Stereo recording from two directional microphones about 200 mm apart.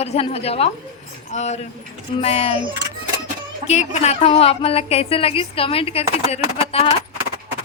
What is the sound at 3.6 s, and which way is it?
A woman's voice, 35° left (ahead or behind).